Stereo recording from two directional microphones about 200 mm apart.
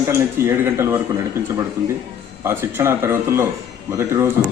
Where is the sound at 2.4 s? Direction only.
10° right (ahead or behind).